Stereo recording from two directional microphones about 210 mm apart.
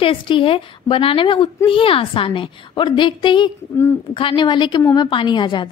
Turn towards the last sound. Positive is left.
turn(degrees=20)  # may be behind; listen again after turning